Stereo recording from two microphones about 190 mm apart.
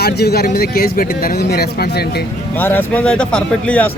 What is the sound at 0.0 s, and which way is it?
Speech, 55° left (ahead or behind).